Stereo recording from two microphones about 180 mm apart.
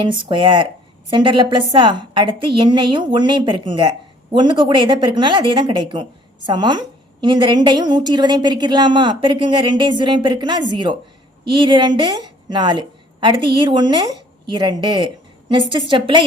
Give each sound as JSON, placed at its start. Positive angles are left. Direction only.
{"t": 0.0, "sound": "a woman's voice", "side_deg": -25}